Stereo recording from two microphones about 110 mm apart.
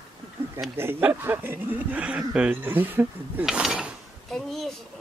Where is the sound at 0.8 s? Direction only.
20° right (ahead or behind).